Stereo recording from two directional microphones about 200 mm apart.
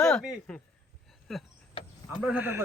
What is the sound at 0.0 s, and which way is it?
Speech, centre (ahead or behind).